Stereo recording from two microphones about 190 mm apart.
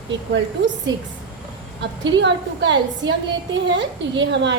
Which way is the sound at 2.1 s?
70° right (ahead or behind).